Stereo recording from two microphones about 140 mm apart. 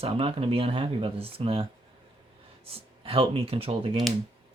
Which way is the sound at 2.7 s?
40° right (ahead or behind).